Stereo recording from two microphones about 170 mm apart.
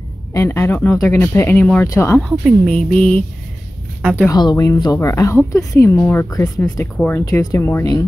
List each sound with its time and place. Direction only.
0.3 s speech: 15° left (ahead or behind)
2.2 s speech: centre (ahead or behind)
4.3 s speech: 20° left (ahead or behind)